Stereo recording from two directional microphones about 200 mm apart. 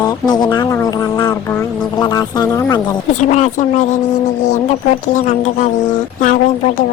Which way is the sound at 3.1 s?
35° left (ahead or behind).